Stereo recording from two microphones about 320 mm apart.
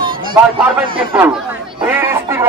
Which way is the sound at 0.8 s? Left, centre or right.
Centre.